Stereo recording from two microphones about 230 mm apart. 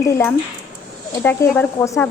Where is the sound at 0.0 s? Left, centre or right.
Centre.